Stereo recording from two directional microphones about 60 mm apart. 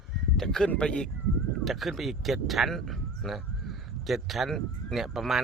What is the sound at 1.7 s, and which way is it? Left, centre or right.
A man's voice, centre.